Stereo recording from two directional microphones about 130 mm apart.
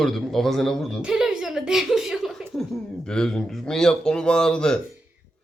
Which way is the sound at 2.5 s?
5° left (ahead or behind).